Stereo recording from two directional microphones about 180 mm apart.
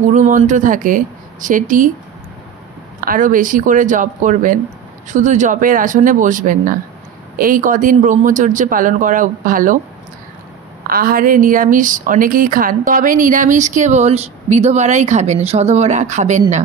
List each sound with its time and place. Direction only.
0.1 s speech: 45° right (ahead or behind)
3.0 s speech: 50° right (ahead or behind)
10.9 s speech: 55° right (ahead or behind)